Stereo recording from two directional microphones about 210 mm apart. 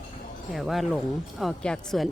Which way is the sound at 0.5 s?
Centre (ahead or behind).